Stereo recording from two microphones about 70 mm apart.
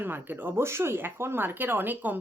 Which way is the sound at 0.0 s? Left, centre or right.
Right.